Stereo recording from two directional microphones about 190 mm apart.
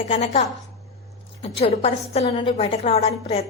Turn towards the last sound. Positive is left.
turn(degrees=35)  # may be behind; listen again after turning